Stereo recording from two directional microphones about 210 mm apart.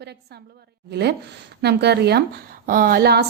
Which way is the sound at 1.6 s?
50° right (ahead or behind).